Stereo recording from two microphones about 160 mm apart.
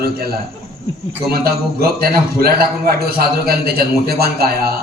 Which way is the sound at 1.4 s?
70° right (ahead or behind).